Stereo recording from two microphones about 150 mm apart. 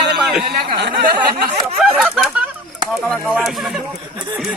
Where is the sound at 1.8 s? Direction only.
Centre (ahead or behind).